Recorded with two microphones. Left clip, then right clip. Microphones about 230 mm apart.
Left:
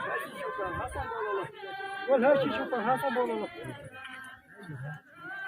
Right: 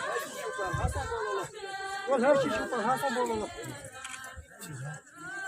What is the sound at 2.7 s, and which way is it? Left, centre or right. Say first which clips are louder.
Speech: left 2 dB; left.